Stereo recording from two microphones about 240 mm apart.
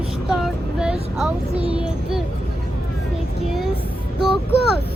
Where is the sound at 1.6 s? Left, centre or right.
Right.